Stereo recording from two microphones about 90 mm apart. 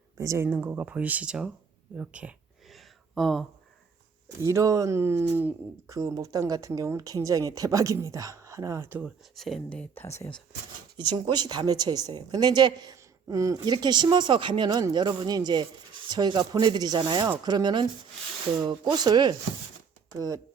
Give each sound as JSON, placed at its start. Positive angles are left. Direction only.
{"t": 0.2, "sound": "speech", "side_deg": -35}
{"t": 0.4, "sound": "speech", "side_deg": -20}
{"t": 2.6, "sound": "a sound", "side_deg": 0}
{"t": 4.4, "sound": "speech", "side_deg": -35}
{"t": 5.9, "sound": "speech", "side_deg": -40}
{"t": 9.3, "sound": "speech", "side_deg": 0}
{"t": 9.6, "sound": "speech", "side_deg": 15}
{"t": 10.9, "sound": "speech", "side_deg": -55}
{"t": 13.2, "sound": "speech", "side_deg": -40}
{"t": 13.7, "sound": "speech", "side_deg": -55}